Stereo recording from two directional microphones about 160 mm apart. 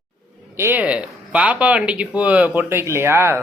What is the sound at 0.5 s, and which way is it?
Speech, 15° right (ahead or behind).